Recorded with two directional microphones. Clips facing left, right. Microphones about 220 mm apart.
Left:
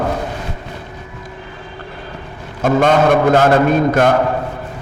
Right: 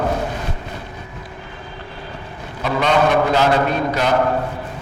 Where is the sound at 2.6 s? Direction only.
50° left (ahead or behind).